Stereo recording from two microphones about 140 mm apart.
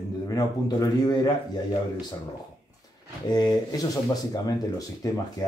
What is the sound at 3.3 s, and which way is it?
Speech, 30° left (ahead or behind).